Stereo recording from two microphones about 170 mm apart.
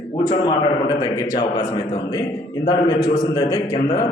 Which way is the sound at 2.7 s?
25° left (ahead or behind).